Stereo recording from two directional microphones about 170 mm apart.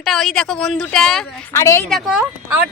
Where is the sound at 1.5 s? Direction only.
15° left (ahead or behind).